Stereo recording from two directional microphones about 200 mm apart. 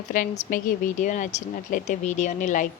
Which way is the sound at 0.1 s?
40° left (ahead or behind).